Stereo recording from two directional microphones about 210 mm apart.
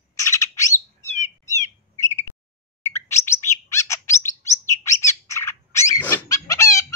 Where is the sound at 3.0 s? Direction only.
15° left (ahead or behind).